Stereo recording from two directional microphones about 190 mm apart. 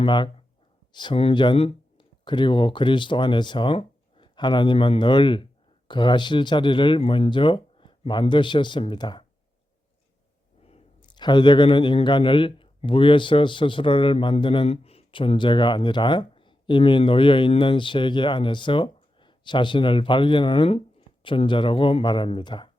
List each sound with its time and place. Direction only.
0.0 s speech: 25° left (ahead or behind)
10.7 s a man's voice: 25° left (ahead or behind)